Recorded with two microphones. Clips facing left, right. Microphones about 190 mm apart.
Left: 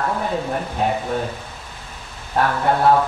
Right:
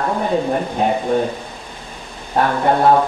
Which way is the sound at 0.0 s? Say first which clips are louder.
Right 4 dB; 20° right (ahead or behind).